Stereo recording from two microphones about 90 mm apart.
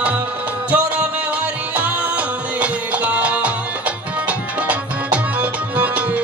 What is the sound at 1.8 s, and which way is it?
Music, 15° right (ahead or behind).